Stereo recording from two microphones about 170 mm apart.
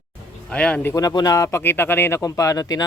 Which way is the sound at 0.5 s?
5° left (ahead or behind).